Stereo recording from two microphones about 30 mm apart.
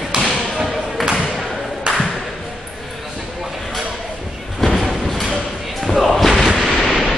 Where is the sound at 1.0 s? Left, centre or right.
Right.